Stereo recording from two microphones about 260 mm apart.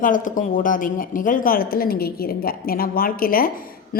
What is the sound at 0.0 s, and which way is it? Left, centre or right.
A woman's voice, left.